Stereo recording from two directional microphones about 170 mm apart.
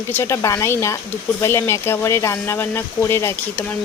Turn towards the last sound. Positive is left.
turn(degrees=15)  # may be behind; listen again after turning